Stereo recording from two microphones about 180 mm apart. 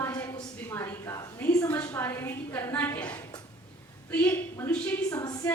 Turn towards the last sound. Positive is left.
turn(degrees=20)  # may be behind; listen again after turning